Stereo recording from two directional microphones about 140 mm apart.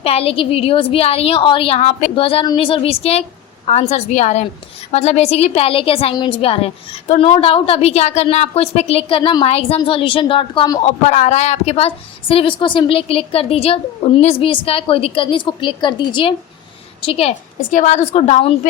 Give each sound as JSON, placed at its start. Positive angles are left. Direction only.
{"t": 0.0, "sound": "a woman's voice", "side_deg": 45}
{"t": 11.0, "sound": "a woman's voice", "side_deg": 55}
{"t": 17.7, "sound": "a woman's voice", "side_deg": 65}